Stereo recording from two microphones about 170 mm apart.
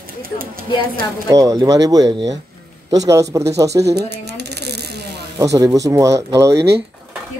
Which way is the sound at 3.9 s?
75° right (ahead or behind).